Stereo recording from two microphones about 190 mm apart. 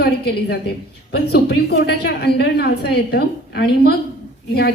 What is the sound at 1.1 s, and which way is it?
A woman's voice, 60° left (ahead or behind).